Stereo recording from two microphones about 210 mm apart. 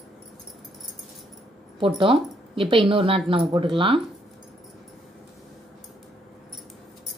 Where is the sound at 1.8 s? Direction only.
25° right (ahead or behind).